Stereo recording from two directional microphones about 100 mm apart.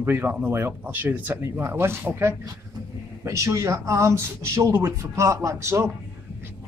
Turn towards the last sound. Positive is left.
turn(degrees=-30)  # may be behind; listen again after turning